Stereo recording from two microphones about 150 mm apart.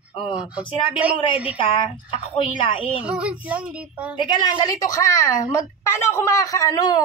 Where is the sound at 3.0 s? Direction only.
5° right (ahead or behind).